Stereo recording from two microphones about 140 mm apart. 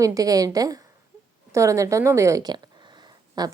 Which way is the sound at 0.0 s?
25° right (ahead or behind).